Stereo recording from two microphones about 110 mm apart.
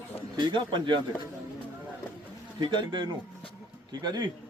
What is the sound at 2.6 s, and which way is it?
A man's voice, 45° right (ahead or behind).